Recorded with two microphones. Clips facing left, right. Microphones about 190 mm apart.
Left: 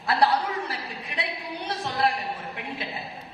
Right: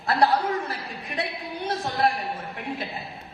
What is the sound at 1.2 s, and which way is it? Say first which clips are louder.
Speech: right 3 dB; 45° right (ahead or behind).